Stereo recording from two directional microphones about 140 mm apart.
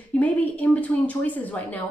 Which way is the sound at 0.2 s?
10° left (ahead or behind).